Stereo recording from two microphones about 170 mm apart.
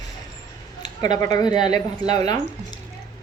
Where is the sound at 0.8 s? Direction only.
25° left (ahead or behind).